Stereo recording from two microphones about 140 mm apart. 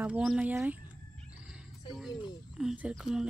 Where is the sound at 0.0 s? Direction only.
5° right (ahead or behind).